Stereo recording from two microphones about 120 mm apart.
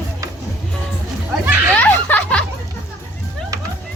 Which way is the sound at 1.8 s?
15° left (ahead or behind).